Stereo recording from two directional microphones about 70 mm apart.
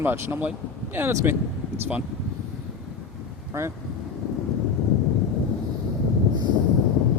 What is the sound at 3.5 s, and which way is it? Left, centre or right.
Speech, right.